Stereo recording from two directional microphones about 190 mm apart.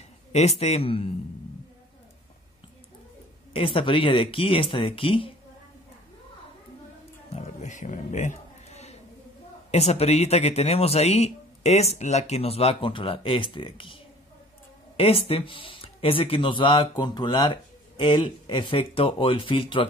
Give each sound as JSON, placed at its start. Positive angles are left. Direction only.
{"t": 0.3, "sound": "a man's voice", "side_deg": 35}
{"t": 3.5, "sound": "speech", "side_deg": 25}
{"t": 7.3, "sound": "music", "side_deg": 40}
{"t": 9.7, "sound": "a man's voice", "side_deg": 35}
{"t": 15.0, "sound": "speech", "side_deg": 30}